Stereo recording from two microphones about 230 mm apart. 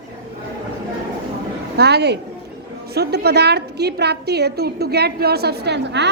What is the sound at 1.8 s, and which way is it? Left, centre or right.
A woman's voice, right.